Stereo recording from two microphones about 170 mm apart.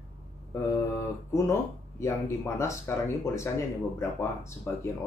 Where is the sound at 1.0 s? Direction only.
15° left (ahead or behind).